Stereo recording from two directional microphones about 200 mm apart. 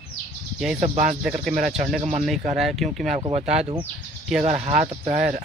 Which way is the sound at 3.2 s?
30° right (ahead or behind).